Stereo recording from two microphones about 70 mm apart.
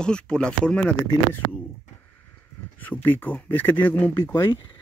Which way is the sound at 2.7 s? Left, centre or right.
Left.